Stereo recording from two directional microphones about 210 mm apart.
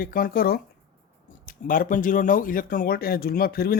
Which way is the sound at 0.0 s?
45° left (ahead or behind).